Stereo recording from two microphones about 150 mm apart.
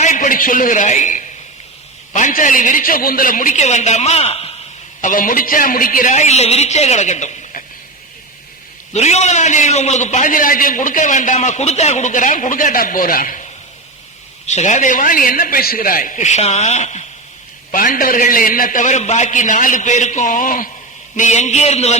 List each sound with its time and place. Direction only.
0.0 s a man's voice: 55° left (ahead or behind)
4.9 s a man's voice: 60° left (ahead or behind)
8.9 s a man's voice: 50° left (ahead or behind); by 13.4 s 65° left (ahead or behind)
14.4 s a man's voice: 50° left (ahead or behind)
17.7 s a man's voice: 65° left (ahead or behind)
21.2 s a man's voice: 50° left (ahead or behind)